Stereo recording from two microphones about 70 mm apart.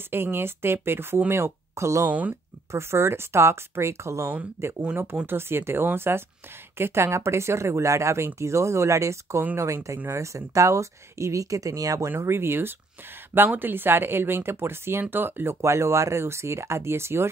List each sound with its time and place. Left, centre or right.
0.1 s speech: right
2.0 s speech: right
2.7 s speech: right
12.2 s speech: right
15.6 s speech: right